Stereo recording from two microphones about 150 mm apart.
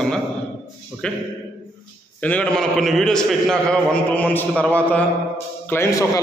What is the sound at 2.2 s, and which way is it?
A man's voice, 10° left (ahead or behind).